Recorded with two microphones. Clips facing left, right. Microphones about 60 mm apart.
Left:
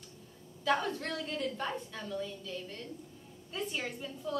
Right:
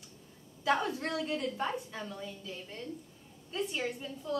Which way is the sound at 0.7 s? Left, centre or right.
Centre.